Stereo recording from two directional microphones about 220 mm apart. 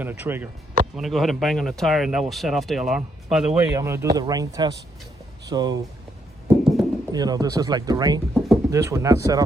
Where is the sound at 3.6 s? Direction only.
10° right (ahead or behind).